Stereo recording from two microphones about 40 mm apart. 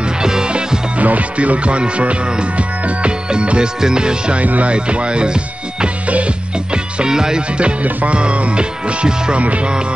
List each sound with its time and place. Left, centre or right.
0.2 s music: centre
0.9 s music: right
4.4 s speech: right
4.7 s music: right
6.0 s music: right
6.7 s music: centre
7.8 s speech: right
8.2 s music: right
9.4 s speech: right